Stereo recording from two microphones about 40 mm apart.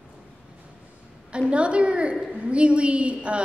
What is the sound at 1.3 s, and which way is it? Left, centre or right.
A woman's voice, right.